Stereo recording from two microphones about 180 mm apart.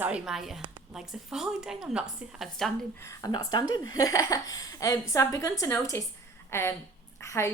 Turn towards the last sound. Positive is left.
turn(degrees=15)  # may be behind; listen again after turning